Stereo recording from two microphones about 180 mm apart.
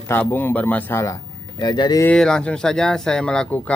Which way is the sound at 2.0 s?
5° left (ahead or behind).